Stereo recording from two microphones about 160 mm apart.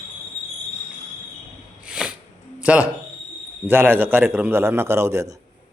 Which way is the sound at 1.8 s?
5° right (ahead or behind).